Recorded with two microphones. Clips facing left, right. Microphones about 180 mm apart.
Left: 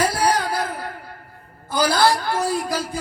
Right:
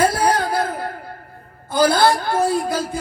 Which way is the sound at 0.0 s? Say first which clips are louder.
Right 3 dB; 25° right (ahead or behind).